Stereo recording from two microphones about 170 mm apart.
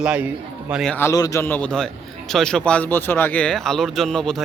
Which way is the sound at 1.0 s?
20° left (ahead or behind).